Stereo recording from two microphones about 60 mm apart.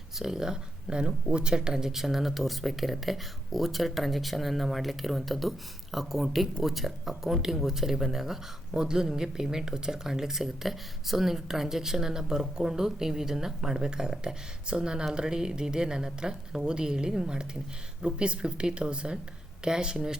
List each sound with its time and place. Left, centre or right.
0.2 s speech: centre